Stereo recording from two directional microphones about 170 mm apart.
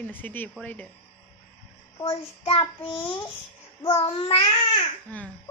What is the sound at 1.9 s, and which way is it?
Child singing, 35° left (ahead or behind).